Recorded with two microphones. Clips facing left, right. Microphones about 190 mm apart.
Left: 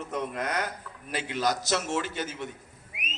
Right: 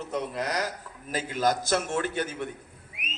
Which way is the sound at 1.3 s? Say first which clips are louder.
Right 2 dB; 50° right (ahead or behind).